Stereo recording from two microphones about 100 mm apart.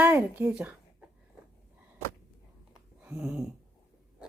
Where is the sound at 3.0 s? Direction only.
15° right (ahead or behind).